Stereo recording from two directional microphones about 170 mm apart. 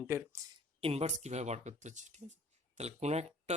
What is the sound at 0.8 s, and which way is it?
Speech, 35° right (ahead or behind).